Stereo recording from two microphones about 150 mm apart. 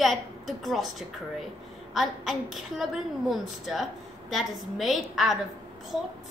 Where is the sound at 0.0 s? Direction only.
Centre (ahead or behind).